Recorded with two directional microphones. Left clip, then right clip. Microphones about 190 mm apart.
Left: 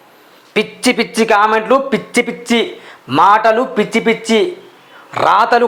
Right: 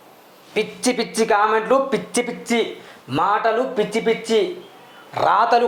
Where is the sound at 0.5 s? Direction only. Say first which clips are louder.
Left 7 dB; 30° left (ahead or behind).